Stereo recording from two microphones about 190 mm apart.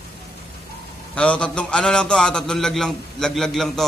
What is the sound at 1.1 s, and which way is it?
A man's voice, 5° left (ahead or behind).